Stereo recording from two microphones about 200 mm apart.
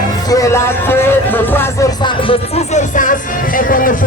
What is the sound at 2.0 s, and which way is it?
Music, 25° left (ahead or behind).